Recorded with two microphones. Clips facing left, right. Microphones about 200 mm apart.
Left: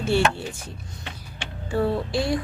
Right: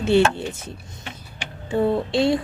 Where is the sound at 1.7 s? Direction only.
20° right (ahead or behind).